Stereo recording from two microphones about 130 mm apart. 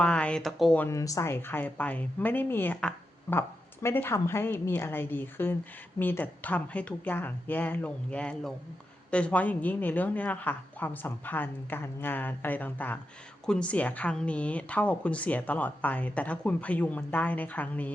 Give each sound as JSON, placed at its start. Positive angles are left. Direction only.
{"t": 0.0, "sound": "speech", "side_deg": 10}
{"t": 0.8, "sound": "speech", "side_deg": 25}